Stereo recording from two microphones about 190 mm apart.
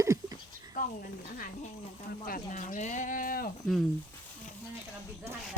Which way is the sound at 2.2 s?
45° left (ahead or behind).